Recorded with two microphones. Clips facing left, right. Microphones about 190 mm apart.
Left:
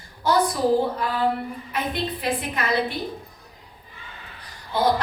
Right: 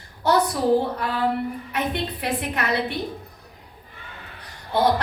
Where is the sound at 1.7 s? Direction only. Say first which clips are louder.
Left 1 dB; 65° right (ahead or behind).